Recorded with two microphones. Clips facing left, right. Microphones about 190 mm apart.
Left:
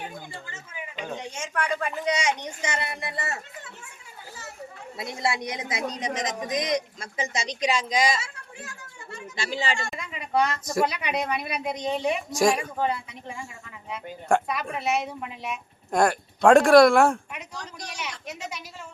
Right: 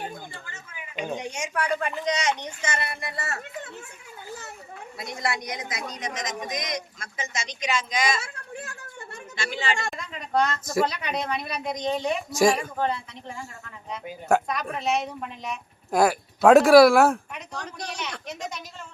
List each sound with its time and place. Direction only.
0.9 s speech: 15° right (ahead or behind)
2.0 s speech: 10° left (ahead or behind)
4.9 s a woman's voice: 25° left (ahead or behind)
8.2 s a sound: 55° right (ahead or behind)
9.3 s a woman's voice: 35° left (ahead or behind)
9.9 s a sound: 10° left (ahead or behind)
10.8 s speech: 10° left (ahead or behind)
12.5 s speech: 10° left (ahead or behind)